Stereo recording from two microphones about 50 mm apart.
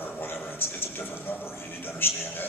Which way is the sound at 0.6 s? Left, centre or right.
Left.